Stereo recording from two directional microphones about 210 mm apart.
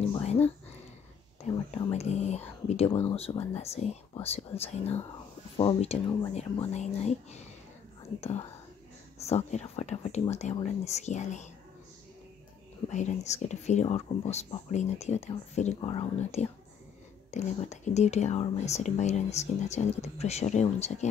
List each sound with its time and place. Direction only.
0.0 s a sound: 30° left (ahead or behind)
1.9 s speech: 30° left (ahead or behind)
9.2 s speech: 30° left (ahead or behind)
12.8 s speech: 35° left (ahead or behind)